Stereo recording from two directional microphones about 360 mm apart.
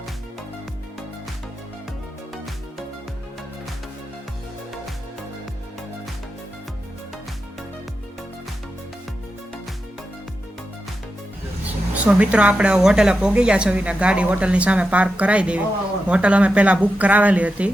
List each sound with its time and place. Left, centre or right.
11.6 s speech: centre